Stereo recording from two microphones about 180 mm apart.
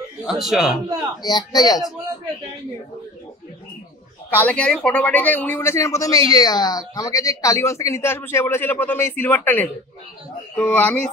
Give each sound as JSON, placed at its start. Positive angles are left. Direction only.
{"t": 0.4, "sound": "a man's voice", "side_deg": 0}
{"t": 1.2, "sound": "a man's voice", "side_deg": 20}
{"t": 4.3, "sound": "speech", "side_deg": 10}